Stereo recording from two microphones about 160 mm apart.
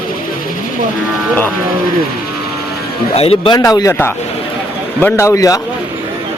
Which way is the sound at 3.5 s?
20° left (ahead or behind).